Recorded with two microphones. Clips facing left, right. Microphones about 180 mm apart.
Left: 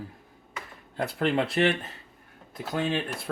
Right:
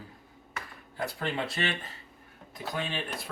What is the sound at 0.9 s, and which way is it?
Speech, 60° left (ahead or behind).